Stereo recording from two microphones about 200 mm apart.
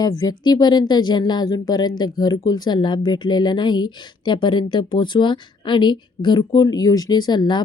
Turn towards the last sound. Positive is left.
turn(degrees=20)  # may be behind; listen again after turning